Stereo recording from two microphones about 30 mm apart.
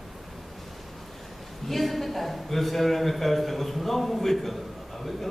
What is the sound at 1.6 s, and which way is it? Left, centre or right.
A man's voice, centre.